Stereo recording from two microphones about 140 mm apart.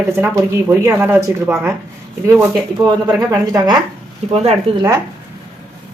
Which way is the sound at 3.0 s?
25° right (ahead or behind).